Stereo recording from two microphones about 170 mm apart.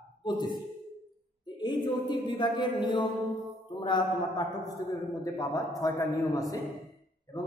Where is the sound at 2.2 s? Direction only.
25° left (ahead or behind).